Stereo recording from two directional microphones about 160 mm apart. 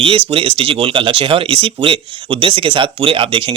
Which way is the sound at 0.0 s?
35° right (ahead or behind).